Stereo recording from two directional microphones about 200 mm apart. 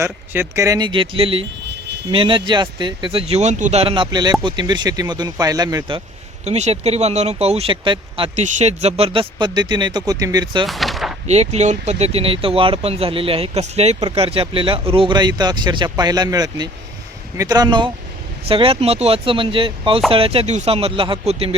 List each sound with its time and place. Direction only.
0.0 s speech: 15° right (ahead or behind)
1.6 s a sound: 60° right (ahead or behind)
2.0 s speech: 25° right (ahead or behind)
6.4 s speech: 35° right (ahead or behind)
10.7 s a sound: centre (ahead or behind)
11.3 s speech: 35° right (ahead or behind)